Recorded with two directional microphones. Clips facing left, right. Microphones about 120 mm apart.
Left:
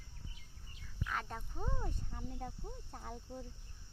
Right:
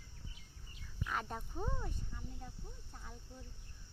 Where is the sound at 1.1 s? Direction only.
10° right (ahead or behind).